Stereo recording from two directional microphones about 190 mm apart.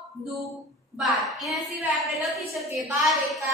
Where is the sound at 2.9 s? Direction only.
Centre (ahead or behind).